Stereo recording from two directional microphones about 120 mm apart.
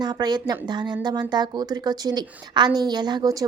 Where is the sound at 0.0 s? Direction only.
35° right (ahead or behind).